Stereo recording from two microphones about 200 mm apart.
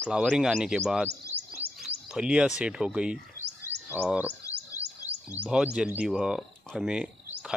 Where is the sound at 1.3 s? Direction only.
10° right (ahead or behind).